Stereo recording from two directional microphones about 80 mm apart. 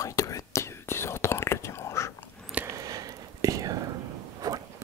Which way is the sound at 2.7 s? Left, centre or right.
Right.